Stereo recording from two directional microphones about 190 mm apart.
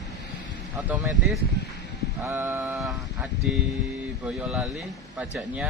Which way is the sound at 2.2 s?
15° right (ahead or behind).